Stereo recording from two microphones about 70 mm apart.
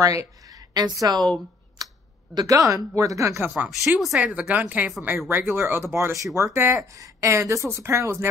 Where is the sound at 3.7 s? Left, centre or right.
Centre.